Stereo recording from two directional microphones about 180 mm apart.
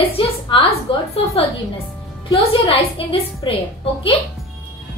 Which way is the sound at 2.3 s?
35° left (ahead or behind).